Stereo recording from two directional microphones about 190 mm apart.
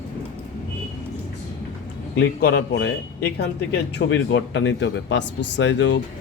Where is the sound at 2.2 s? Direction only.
60° left (ahead or behind).